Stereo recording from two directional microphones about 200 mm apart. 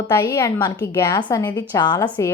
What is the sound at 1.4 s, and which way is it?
Speech, 10° left (ahead or behind).